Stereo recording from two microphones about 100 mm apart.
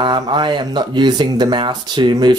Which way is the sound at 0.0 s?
50° right (ahead or behind).